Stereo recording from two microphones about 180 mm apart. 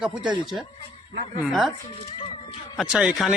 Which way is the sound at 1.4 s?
Centre (ahead or behind).